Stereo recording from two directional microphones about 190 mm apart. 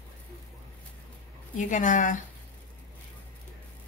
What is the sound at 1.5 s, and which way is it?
Speech, 40° left (ahead or behind).